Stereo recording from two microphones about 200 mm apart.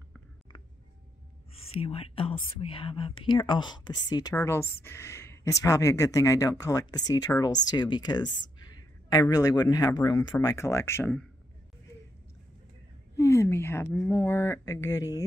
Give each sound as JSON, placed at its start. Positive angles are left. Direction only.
{"t": 1.7, "sound": "speech", "side_deg": 30}
{"t": 13.1, "sound": "a woman's voice", "side_deg": 15}